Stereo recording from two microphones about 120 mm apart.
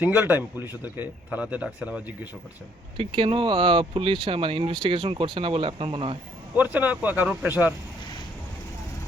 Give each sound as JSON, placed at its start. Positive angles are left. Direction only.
{"t": 0.0, "sound": "speech", "side_deg": -15}
{"t": 3.0, "sound": "speech", "side_deg": -45}
{"t": 6.6, "sound": "speech", "side_deg": -15}